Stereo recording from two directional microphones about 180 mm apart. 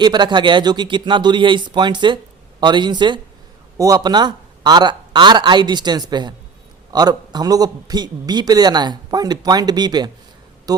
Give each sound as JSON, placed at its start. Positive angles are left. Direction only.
{"t": 0.0, "sound": "a man's voice", "side_deg": -25}